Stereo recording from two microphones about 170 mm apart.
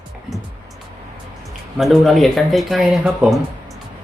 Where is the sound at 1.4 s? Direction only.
Centre (ahead or behind).